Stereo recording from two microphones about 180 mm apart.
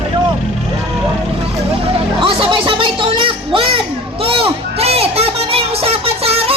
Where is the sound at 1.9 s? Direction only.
30° right (ahead or behind).